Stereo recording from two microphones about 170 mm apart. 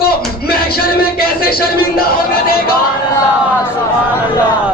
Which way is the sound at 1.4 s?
65° left (ahead or behind).